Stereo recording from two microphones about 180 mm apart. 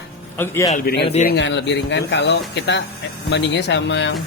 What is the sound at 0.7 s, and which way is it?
Speech, 55° left (ahead or behind).